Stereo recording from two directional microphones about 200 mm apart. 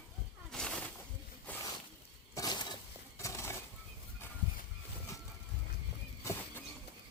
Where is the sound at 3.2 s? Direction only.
15° left (ahead or behind).